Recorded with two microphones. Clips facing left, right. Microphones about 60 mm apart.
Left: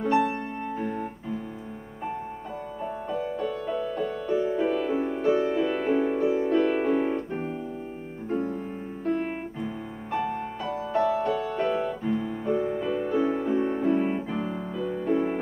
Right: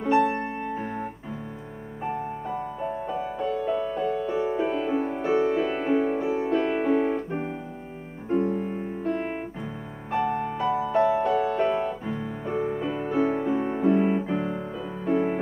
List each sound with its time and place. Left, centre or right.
0.0 s music: centre
0.7 s music: centre
2.8 s music: centre
3.2 s music: centre
8.4 s music: right
9.0 s music: centre